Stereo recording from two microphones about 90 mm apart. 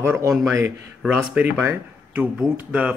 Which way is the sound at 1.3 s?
20° right (ahead or behind).